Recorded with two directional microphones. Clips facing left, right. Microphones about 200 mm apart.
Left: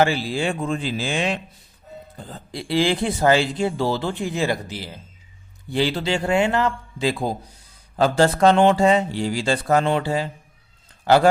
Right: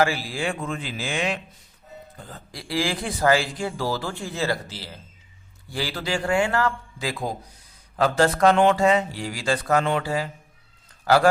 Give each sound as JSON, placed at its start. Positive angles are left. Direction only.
{"t": 0.0, "sound": "a man's voice", "side_deg": 25}